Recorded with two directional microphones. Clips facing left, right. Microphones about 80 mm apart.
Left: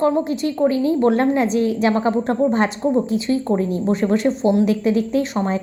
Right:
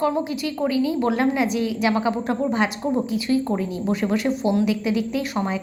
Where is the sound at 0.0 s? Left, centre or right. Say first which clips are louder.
Left 4 dB; left.